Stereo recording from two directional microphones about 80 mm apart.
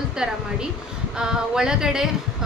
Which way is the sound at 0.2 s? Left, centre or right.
Centre.